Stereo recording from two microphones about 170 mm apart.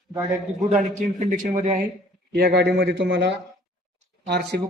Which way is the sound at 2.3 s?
75° right (ahead or behind).